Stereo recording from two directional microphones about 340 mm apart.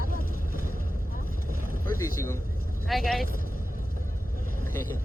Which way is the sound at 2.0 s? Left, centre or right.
Centre.